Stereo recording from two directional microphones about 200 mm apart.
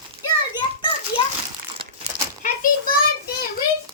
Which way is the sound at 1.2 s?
25° left (ahead or behind).